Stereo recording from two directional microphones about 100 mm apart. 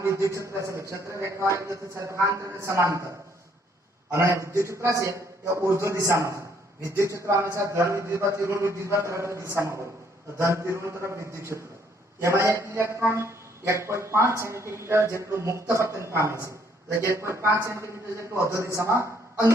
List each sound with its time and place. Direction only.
0.0 s a man's voice: 30° right (ahead or behind)
4.1 s a man's voice: 30° right (ahead or behind)